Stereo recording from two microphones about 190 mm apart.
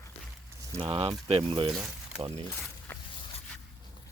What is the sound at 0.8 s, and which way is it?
Speech, 30° right (ahead or behind).